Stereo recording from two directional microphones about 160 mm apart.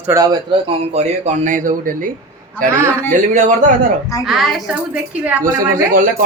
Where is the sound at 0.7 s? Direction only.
45° right (ahead or behind).